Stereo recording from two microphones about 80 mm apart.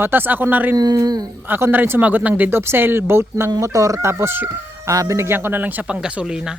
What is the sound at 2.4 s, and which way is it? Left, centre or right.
Speech, right.